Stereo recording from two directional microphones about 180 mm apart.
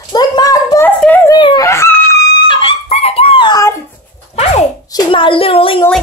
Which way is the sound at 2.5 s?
30° left (ahead or behind).